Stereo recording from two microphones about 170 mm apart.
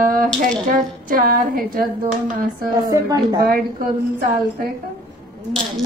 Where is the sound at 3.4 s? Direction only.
55° right (ahead or behind).